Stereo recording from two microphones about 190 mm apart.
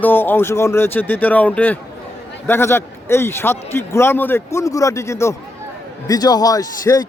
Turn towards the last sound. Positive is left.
turn(degrees=20)  # may be behind; listen again after turning